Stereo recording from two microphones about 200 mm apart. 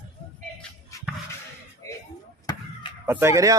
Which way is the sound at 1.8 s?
15° left (ahead or behind).